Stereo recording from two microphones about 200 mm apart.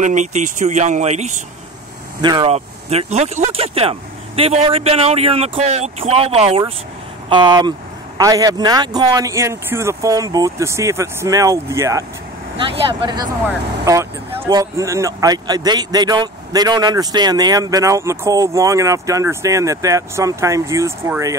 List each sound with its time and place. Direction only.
0.0 s speech: 35° right (ahead or behind); by 12.0 s 15° right (ahead or behind)
12.5 s speech: 25° right (ahead or behind)